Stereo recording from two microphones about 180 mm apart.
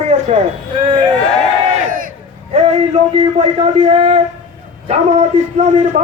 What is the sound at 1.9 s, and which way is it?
Crowd, 50° right (ahead or behind).